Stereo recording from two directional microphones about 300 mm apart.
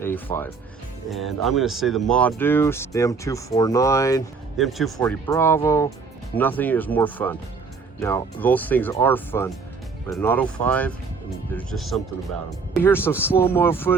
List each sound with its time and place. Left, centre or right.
0.0 s speech: centre
4.5 s speech: centre
4.9 s speech: centre